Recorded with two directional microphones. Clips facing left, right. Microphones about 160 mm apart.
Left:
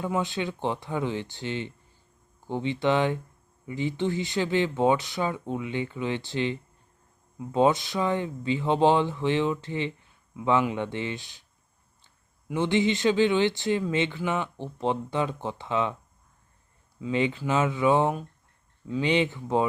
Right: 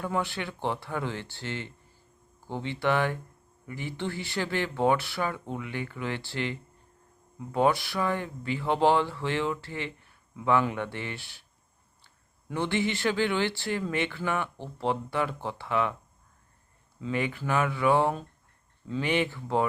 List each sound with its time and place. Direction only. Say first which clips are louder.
0.0 s speech: left 3 dB; 20° left (ahead or behind)
17.0 s speech: left 4 dB; 20° left (ahead or behind)